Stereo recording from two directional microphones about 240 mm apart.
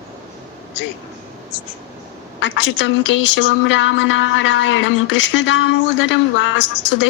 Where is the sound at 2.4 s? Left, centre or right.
Left.